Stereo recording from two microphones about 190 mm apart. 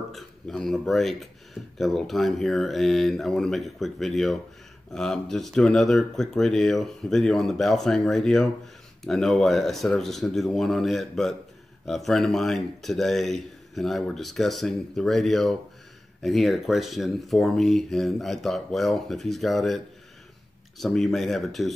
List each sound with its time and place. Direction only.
0.1 s speech: centre (ahead or behind)
20.8 s speech: centre (ahead or behind)